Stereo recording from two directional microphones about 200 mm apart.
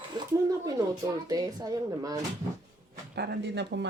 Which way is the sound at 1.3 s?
20° right (ahead or behind).